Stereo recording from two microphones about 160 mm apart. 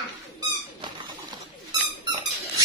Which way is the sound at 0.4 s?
30° right (ahead or behind).